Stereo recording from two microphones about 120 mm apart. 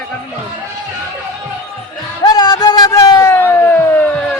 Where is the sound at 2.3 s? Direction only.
35° left (ahead or behind); by 4.3 s 15° left (ahead or behind).